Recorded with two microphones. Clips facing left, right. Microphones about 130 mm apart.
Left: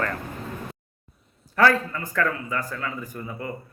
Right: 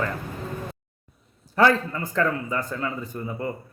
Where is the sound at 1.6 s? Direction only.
25° right (ahead or behind).